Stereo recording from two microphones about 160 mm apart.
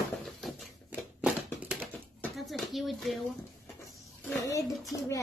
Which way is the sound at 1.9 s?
10° left (ahead or behind).